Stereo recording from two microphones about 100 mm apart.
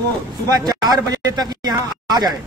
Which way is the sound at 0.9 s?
40° right (ahead or behind).